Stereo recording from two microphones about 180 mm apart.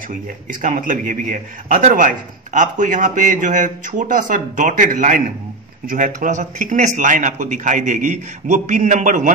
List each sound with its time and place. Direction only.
0.1 s a man's voice: 50° right (ahead or behind)